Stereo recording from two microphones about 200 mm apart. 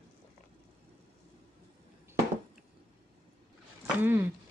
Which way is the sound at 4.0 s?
10° right (ahead or behind).